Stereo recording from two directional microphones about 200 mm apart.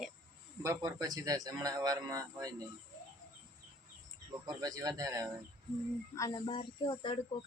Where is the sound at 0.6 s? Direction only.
20° right (ahead or behind).